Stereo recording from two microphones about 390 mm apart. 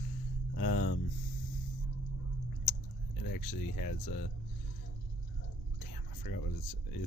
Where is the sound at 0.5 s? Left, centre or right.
Left.